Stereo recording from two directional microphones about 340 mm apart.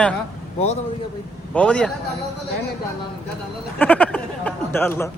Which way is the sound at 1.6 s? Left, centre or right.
Centre.